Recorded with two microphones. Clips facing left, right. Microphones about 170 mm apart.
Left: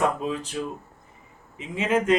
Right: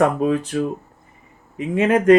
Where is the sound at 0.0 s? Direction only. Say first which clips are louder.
Right 8 dB; 60° right (ahead or behind).